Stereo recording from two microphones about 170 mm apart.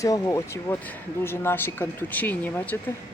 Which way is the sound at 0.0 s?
20° left (ahead or behind).